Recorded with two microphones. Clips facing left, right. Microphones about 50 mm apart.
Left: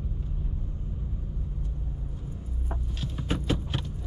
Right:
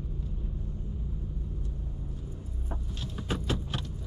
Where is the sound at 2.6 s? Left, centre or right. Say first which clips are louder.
Left 3 dB; centre.